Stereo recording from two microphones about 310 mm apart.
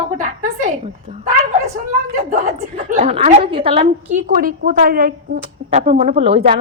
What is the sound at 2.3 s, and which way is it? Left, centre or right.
A woman's voice, right.